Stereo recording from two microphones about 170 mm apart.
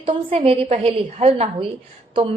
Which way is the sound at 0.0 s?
35° right (ahead or behind).